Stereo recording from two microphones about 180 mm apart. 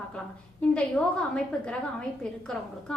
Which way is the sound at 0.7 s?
5° left (ahead or behind).